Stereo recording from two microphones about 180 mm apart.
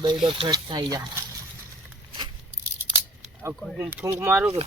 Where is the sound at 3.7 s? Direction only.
10° right (ahead or behind).